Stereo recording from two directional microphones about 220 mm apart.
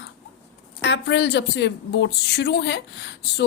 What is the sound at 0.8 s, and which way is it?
A woman's voice, 55° left (ahead or behind).